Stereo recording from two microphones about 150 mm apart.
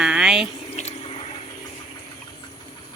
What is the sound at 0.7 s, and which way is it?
Water, 45° left (ahead or behind).